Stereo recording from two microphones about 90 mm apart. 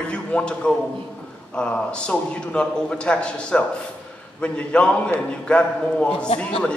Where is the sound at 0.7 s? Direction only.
10° left (ahead or behind).